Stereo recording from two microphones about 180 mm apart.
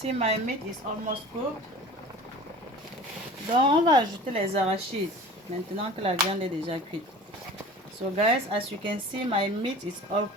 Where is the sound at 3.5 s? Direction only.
25° right (ahead or behind).